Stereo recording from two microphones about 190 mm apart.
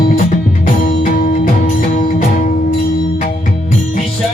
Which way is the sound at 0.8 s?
45° left (ahead or behind).